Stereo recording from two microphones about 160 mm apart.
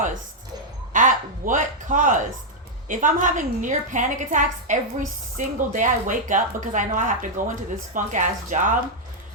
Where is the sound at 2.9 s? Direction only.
55° right (ahead or behind).